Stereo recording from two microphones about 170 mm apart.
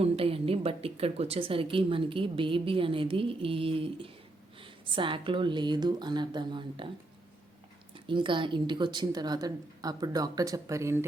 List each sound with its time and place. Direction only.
0.0 s a woman's voice: 35° right (ahead or behind)
7.9 s a woman's voice: 30° right (ahead or behind)